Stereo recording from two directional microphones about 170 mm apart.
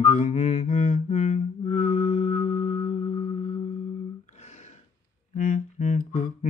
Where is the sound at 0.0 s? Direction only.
45° left (ahead or behind).